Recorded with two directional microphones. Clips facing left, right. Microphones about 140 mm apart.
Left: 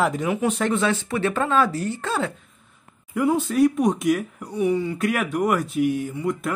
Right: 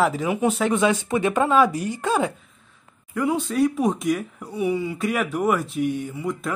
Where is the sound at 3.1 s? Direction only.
5° left (ahead or behind).